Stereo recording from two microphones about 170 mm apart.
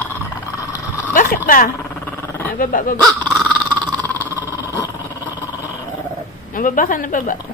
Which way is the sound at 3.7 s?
20° right (ahead or behind).